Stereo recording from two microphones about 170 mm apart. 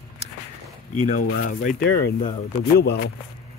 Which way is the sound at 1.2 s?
55° left (ahead or behind).